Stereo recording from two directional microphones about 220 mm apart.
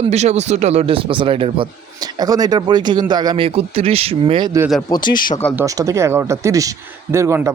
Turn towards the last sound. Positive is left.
turn(degrees=-15)  # may be behind; listen again after turning